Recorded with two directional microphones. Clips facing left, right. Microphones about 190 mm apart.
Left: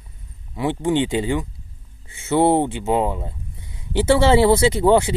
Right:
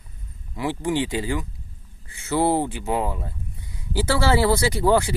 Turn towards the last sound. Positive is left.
turn(degrees=20)  # may be behind; listen again after turning